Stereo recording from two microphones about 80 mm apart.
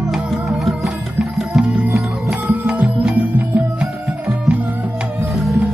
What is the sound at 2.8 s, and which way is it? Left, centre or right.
Music, centre.